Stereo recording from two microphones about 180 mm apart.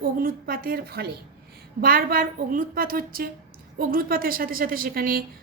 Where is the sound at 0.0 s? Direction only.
50° right (ahead or behind).